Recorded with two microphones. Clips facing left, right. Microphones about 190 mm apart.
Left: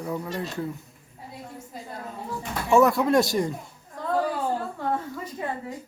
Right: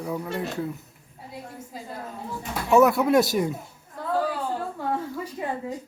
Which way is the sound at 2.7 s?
5° right (ahead or behind).